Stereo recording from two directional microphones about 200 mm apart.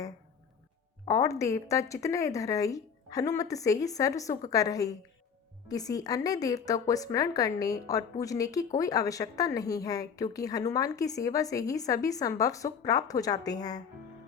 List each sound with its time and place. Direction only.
1.0 s speech: 15° left (ahead or behind)